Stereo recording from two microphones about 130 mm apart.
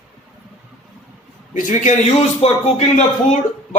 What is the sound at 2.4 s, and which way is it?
Music, 55° left (ahead or behind).